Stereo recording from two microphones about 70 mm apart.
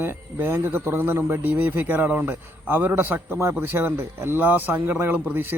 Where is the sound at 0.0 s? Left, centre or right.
Right.